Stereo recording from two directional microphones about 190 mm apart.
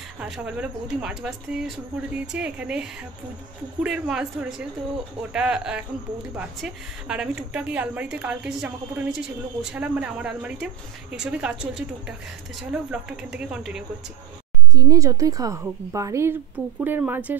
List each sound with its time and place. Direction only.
0.2 s speech: 5° right (ahead or behind)
3.8 s speech: 5° right (ahead or behind)
14.7 s a woman's voice: 20° right (ahead or behind)